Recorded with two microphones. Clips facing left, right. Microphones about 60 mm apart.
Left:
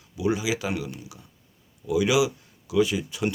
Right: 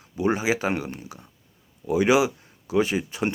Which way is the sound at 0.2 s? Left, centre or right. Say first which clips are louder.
Right 3 dB; right.